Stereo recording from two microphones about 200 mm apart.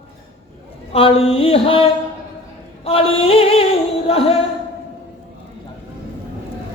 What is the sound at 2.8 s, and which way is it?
Music, 30° left (ahead or behind).